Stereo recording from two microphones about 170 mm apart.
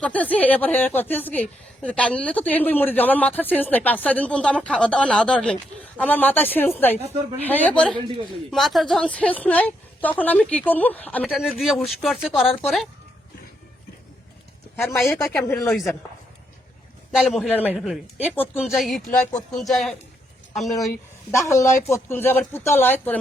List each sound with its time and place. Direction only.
0.0 s a woman's voice: 10° left (ahead or behind)
11.3 s speech: centre (ahead or behind)
14.9 s a woman's voice: 15° left (ahead or behind); by 16.0 s centre (ahead or behind)
17.1 s speech: centre (ahead or behind)
18.2 s a woman's voice: 10° left (ahead or behind)
18.6 s speech: centre (ahead or behind)
21.2 s a woman's voice: 15° left (ahead or behind)